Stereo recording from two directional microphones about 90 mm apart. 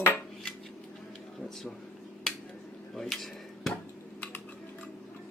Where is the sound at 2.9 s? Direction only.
5° left (ahead or behind).